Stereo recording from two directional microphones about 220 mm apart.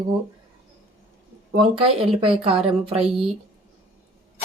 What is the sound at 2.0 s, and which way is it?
A woman's voice, 25° right (ahead or behind).